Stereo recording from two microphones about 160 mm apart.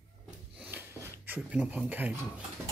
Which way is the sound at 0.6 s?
15° right (ahead or behind).